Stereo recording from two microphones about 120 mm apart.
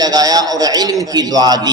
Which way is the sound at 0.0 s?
35° right (ahead or behind).